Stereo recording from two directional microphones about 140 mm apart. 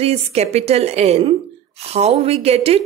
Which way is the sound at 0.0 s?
45° right (ahead or behind).